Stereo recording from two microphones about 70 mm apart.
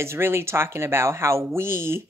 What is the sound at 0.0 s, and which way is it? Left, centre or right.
Speech, right.